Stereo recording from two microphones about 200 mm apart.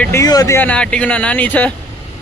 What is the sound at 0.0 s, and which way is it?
Speech, 15° left (ahead or behind).